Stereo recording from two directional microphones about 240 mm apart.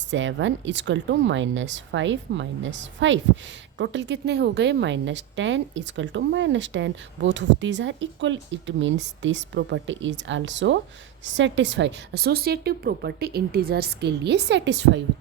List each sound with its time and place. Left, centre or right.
0.1 s a woman's voice: right